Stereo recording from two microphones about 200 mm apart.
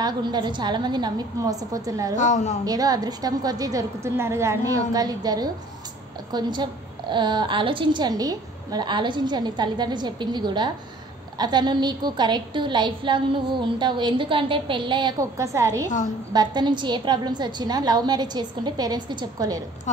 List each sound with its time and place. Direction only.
0.0 s a woman's voice: 20° right (ahead or behind)
2.1 s a woman's voice: 35° left (ahead or behind)
2.6 s a woman's voice: 20° right (ahead or behind)